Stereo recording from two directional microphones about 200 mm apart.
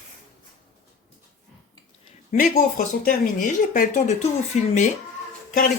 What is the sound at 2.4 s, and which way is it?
Speech, 45° left (ahead or behind).